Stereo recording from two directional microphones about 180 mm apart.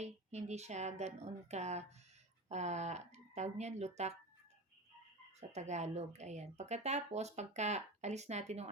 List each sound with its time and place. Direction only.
0.0 s speech: 40° right (ahead or behind)
5.4 s speech: 40° right (ahead or behind)